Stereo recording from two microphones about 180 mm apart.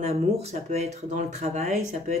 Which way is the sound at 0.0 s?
35° right (ahead or behind).